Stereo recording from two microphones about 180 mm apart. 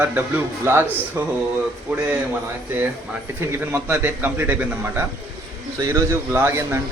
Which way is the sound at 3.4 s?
10° right (ahead or behind).